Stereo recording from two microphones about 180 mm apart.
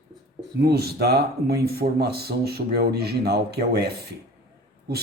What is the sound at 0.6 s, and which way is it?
Speech, 60° right (ahead or behind).